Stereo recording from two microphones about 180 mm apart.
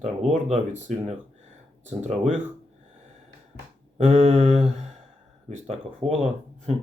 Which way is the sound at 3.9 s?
35° right (ahead or behind).